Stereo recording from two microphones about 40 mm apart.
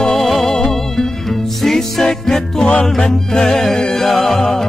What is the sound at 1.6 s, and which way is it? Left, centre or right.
Music, centre.